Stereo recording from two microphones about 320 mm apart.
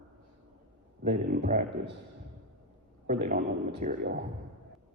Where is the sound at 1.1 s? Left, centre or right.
Right.